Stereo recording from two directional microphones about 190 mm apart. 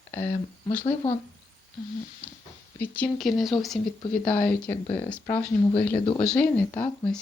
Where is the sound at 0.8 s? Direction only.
30° left (ahead or behind).